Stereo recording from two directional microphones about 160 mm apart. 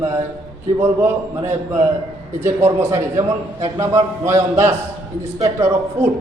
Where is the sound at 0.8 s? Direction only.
15° right (ahead or behind).